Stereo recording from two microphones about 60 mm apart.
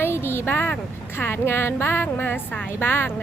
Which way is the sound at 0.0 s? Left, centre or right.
Left.